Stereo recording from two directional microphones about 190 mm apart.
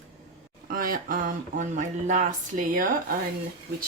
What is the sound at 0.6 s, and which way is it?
Speech, 50° right (ahead or behind).